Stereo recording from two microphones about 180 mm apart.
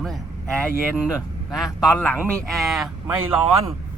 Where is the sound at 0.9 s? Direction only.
5° right (ahead or behind).